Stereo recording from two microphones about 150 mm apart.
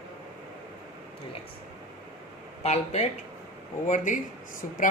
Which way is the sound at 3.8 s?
60° left (ahead or behind).